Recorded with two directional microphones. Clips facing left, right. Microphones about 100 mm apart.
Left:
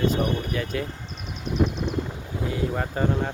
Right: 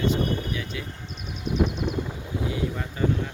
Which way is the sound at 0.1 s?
50° left (ahead or behind).